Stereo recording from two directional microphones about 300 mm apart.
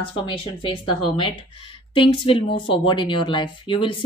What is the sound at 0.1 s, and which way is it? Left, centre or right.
Speech, centre.